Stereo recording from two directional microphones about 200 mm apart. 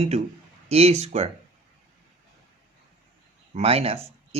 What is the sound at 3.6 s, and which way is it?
Speech, 30° right (ahead or behind).